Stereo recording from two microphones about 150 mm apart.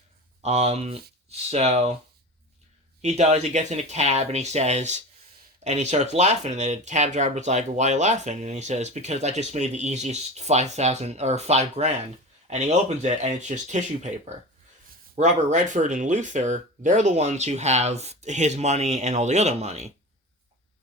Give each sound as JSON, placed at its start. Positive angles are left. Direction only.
{"t": 0.4, "sound": "speech", "side_deg": -45}
{"t": 3.0, "sound": "speech", "side_deg": -50}